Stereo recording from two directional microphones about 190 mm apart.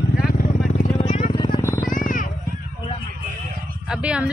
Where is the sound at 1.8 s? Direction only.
45° left (ahead or behind).